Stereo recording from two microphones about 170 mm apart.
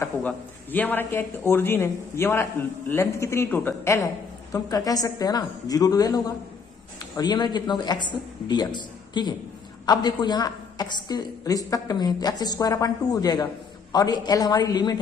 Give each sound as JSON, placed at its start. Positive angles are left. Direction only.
{"t": 0.0, "sound": "a man's voice", "side_deg": 10}